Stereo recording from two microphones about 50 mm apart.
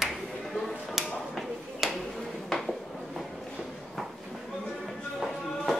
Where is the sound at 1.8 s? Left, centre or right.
Centre.